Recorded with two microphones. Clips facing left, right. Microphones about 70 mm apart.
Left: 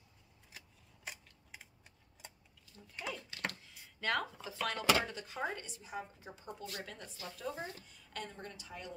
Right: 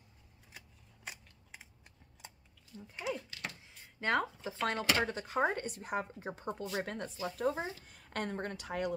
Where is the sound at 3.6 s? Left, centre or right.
Right.